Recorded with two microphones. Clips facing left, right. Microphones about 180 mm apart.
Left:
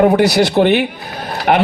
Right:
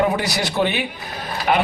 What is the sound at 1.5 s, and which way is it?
Speech, 55° left (ahead or behind).